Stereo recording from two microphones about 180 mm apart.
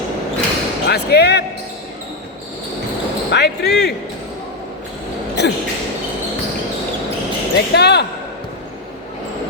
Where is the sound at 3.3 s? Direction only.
70° left (ahead or behind).